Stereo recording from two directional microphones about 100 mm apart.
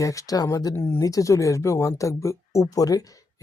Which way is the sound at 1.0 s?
35° left (ahead or behind).